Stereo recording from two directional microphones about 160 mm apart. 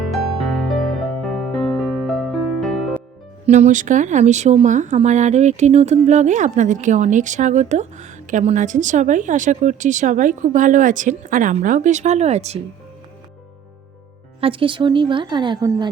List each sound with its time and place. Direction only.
0.1 s music: centre (ahead or behind)
3.4 s speech: 45° right (ahead or behind)
14.4 s speech: 35° right (ahead or behind)